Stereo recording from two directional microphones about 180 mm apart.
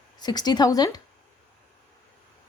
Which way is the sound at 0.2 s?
25° left (ahead or behind).